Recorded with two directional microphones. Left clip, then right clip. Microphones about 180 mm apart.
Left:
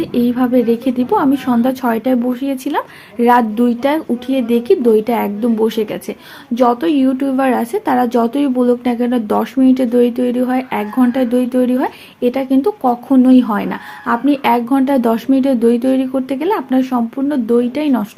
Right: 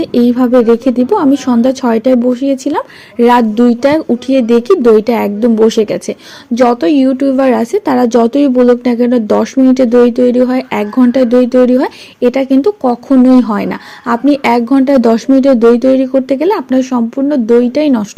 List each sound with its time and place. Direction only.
0.0 s a woman's voice: 40° right (ahead or behind)